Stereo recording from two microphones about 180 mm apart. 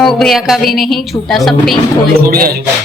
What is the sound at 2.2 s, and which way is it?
Music, 55° right (ahead or behind).